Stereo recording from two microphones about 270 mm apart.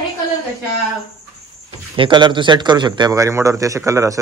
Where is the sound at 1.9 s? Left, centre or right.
Centre.